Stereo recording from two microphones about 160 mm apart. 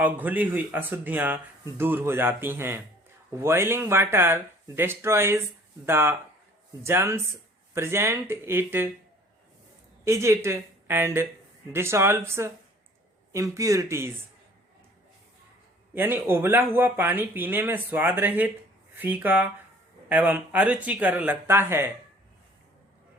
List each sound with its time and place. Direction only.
0.0 s speech: 10° right (ahead or behind)
10.0 s a woman's voice: 20° right (ahead or behind)
16.0 s speech: 15° right (ahead or behind)